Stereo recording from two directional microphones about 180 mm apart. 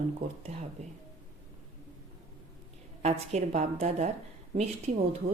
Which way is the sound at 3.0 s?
35° right (ahead or behind).